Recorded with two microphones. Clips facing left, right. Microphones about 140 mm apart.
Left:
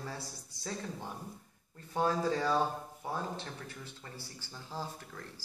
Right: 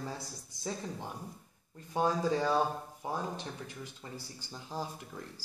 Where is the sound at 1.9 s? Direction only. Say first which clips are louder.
Right 1 dB; 15° right (ahead or behind).